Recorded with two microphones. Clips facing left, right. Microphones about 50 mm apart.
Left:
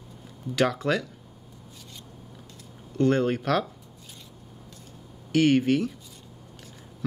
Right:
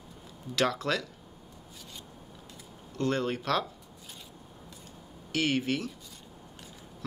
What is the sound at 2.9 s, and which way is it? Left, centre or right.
Speech, left.